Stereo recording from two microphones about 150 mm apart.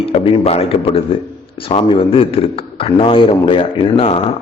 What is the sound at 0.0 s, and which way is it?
A man's voice, 35° left (ahead or behind).